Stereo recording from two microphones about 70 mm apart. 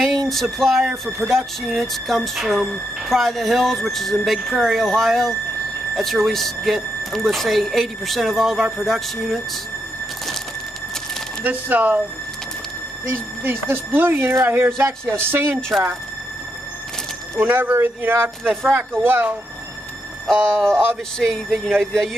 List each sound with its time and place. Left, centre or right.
0.0 s speech: centre
11.4 s speech: right
13.1 s speech: right
17.4 s speech: right
20.3 s speech: right
21.2 s speech: centre